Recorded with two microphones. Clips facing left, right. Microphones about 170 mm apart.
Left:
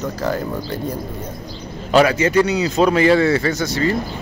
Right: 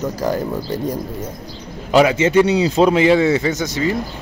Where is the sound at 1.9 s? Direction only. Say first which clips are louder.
Right 1 dB; 15° right (ahead or behind).